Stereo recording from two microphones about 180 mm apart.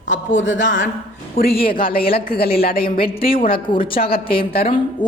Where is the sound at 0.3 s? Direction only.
90° left.